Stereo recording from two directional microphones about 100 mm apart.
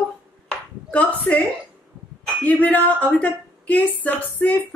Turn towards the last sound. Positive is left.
turn(degrees=15)  # may be behind; listen again after turning